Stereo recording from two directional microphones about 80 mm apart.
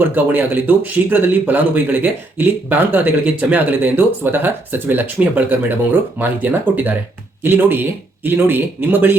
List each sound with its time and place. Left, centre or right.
0.0 s speech: right